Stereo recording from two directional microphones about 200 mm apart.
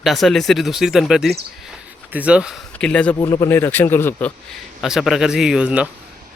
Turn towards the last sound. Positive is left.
turn(degrees=-5)  # may be behind; listen again after turning